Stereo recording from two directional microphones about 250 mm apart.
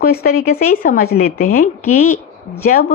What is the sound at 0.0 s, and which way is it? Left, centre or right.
Speech, left.